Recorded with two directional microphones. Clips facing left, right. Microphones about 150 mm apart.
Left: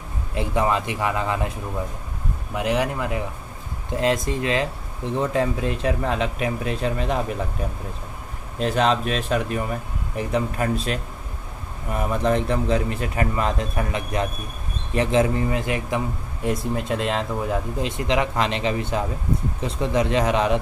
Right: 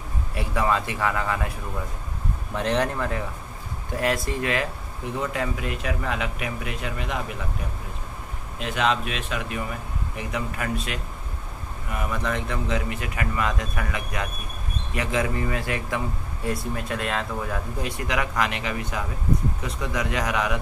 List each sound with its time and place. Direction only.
0.3 s speech: 20° left (ahead or behind)
2.5 s speech: 10° left (ahead or behind); by 7.2 s 35° left (ahead or behind)
8.5 s speech: 35° left (ahead or behind)